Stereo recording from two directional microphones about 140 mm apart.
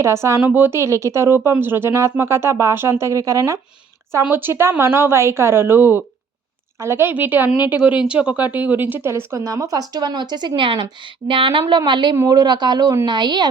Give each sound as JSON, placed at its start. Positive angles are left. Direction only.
{"t": 0.0, "sound": "a woman's voice", "side_deg": -20}